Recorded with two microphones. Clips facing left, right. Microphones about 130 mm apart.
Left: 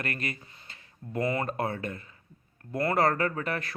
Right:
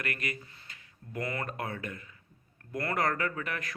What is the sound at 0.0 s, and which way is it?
A man's voice, 30° left (ahead or behind).